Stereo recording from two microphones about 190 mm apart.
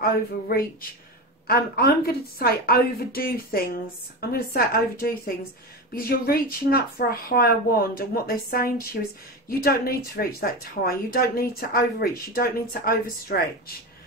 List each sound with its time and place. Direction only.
0.0 s speech: 50° left (ahead or behind)